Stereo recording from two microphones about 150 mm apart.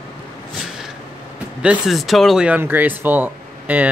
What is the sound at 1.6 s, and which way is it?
Speech, 5° right (ahead or behind).